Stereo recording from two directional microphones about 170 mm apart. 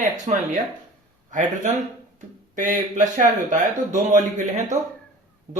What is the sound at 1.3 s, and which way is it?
Speech, 50° right (ahead or behind).